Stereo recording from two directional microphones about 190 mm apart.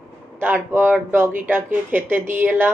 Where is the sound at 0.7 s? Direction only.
10° right (ahead or behind).